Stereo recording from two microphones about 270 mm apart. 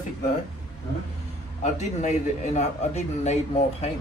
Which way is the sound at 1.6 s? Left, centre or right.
Left.